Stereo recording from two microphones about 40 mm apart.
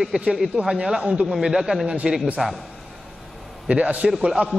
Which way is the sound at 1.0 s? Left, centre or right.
Right.